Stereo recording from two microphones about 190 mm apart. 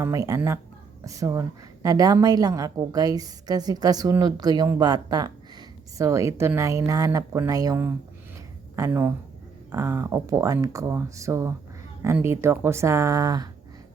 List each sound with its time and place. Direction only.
0.0 s a woman's voice: 15° right (ahead or behind)